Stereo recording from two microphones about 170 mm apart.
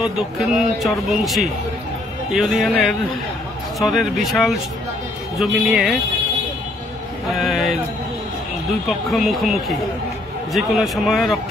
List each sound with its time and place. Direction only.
0.0 s speech: centre (ahead or behind)
7.2 s speech: centre (ahead or behind)
8.8 s speech: centre (ahead or behind)